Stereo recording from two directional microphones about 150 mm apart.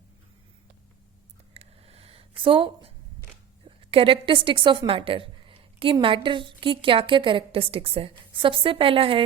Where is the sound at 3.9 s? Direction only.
35° right (ahead or behind).